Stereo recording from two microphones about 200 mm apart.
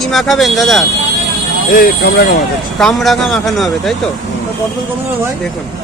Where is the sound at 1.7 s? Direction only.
45° left (ahead or behind).